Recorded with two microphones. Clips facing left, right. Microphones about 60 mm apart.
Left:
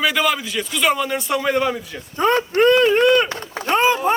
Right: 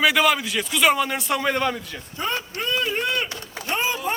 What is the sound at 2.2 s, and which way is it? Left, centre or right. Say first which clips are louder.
Speech: left 12 dB; left.